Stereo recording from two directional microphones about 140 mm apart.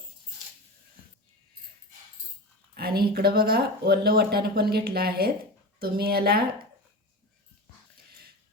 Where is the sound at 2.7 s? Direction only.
90° right.